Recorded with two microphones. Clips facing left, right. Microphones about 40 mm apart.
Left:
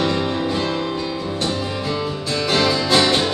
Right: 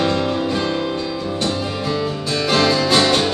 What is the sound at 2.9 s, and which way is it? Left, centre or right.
Music, left.